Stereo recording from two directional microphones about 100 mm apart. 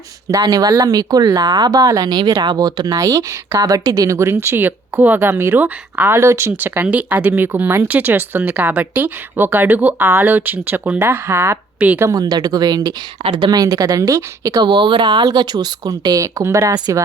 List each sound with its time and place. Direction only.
0.3 s speech: 40° right (ahead or behind)
11.9 s speech: 35° right (ahead or behind)
13.2 s a woman's voice: 60° right (ahead or behind)
13.5 s speech: 35° right (ahead or behind)
14.6 s speech: 50° right (ahead or behind); by 16.7 s 30° right (ahead or behind)
16.7 s speech: 45° right (ahead or behind)